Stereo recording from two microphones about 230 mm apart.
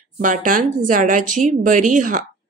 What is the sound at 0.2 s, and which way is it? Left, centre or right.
A woman's voice, right.